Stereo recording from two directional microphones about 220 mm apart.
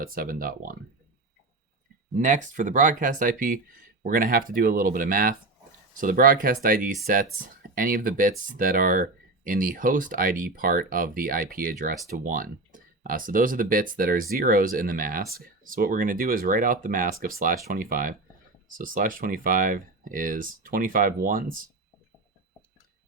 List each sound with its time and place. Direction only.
0.0 s speech: 40° right (ahead or behind)
2.1 s speech: 35° right (ahead or behind)